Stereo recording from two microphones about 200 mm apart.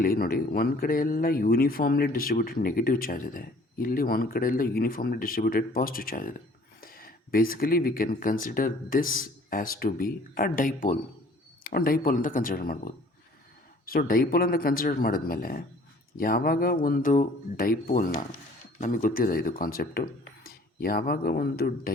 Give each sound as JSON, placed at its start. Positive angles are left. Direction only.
{"t": 0.0, "sound": "speech", "side_deg": 45}